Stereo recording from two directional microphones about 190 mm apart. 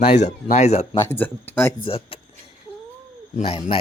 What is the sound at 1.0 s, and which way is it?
Speech, 10° left (ahead or behind).